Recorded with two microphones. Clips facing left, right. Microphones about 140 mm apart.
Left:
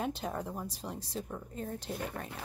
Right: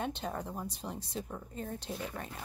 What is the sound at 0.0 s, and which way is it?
A woman's voice, centre (ahead or behind).